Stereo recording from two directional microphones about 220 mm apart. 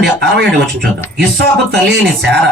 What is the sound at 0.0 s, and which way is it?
A man's voice, 50° right (ahead or behind).